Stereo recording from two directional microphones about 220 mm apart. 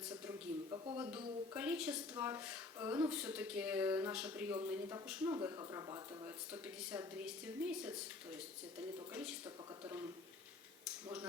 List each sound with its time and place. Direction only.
0.3 s a sound: 20° right (ahead or behind)
1.1 s a woman's voice: 5° right (ahead or behind)
5.3 s a woman's voice: 15° right (ahead or behind)
9.8 s speech: 15° right (ahead or behind)